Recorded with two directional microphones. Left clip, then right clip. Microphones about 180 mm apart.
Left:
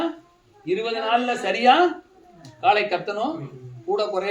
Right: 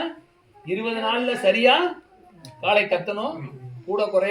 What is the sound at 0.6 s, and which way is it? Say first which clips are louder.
A man's voice: left 1 dB; 25° left (ahead or behind).